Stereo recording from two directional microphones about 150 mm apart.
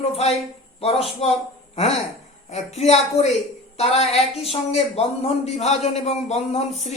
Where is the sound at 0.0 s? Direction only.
45° left (ahead or behind).